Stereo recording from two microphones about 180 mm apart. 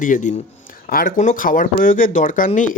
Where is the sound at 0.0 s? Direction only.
45° left (ahead or behind).